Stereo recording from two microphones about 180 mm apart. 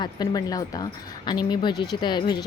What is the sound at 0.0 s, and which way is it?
Speech, 20° left (ahead or behind).